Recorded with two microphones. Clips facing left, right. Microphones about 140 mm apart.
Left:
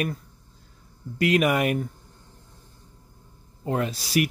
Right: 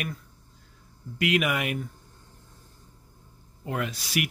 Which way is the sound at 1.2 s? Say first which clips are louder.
Left 5 dB; 40° left (ahead or behind).